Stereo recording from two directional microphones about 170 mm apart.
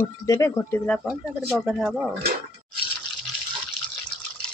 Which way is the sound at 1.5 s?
5° right (ahead or behind).